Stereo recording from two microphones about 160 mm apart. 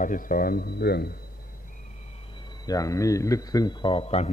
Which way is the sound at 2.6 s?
20° left (ahead or behind).